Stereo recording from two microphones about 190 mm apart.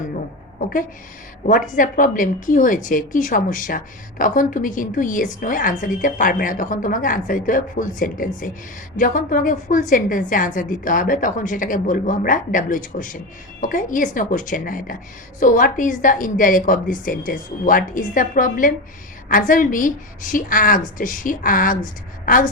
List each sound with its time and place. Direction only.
1.5 s a woman's voice: 45° left (ahead or behind)